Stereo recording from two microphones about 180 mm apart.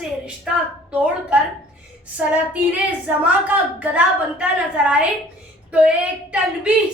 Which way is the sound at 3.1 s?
10° right (ahead or behind).